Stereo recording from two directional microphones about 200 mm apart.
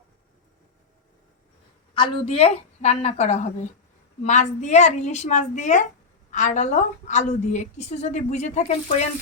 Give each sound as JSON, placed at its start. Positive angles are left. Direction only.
{"t": 2.0, "sound": "a woman's voice", "side_deg": 30}